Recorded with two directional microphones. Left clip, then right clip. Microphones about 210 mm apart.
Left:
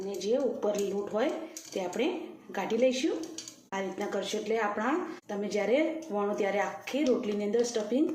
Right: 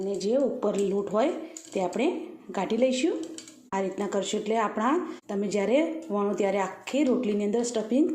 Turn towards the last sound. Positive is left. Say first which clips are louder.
# right 1 dB
turn(degrees=-45)  # may be behind; listen again after turning